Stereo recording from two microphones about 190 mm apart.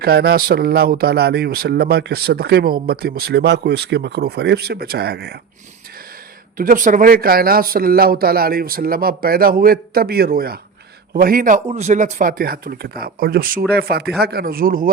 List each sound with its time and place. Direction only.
0.0 s speech: 55° right (ahead or behind)
6.6 s speech: 45° right (ahead or behind)